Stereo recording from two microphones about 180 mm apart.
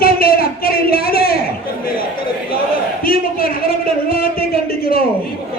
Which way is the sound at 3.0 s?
55° left (ahead or behind).